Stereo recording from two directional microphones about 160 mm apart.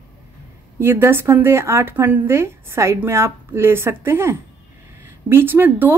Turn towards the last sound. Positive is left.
turn(degrees=-10)  # may be behind; listen again after turning